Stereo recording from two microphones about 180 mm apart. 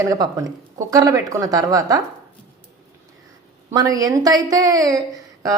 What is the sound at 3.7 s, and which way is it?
A woman's voice, 20° right (ahead or behind).